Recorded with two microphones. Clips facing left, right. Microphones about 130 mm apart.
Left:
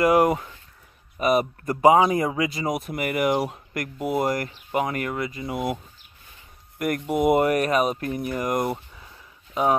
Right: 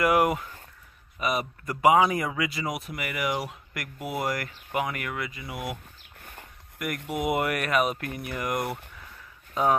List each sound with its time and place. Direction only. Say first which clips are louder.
0.0 s speech: left 4 dB; 30° left (ahead or behind)
1.2 s speech: left 7 dB; 45° left (ahead or behind)
3.4 s speech: left 7 dB; 30° left (ahead or behind)
5.5 s speech: left 9 dB; 50° left (ahead or behind)
7.2 s speech: left 7 dB; 40° left (ahead or behind)
9.5 s speech: left 2 dB; 15° left (ahead or behind)